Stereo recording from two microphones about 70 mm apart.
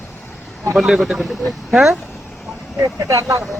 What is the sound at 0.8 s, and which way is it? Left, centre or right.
Speech, centre.